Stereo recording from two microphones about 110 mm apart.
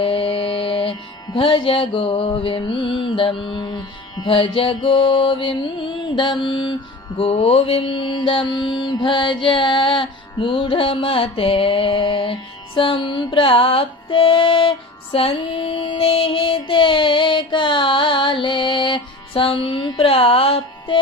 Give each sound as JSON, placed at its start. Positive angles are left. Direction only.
{"t": 0.0, "sound": "music", "side_deg": 55}
{"t": 7.2, "sound": "mantra", "side_deg": 60}